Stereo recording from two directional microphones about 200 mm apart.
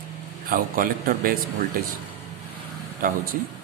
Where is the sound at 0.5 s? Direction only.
45° right (ahead or behind).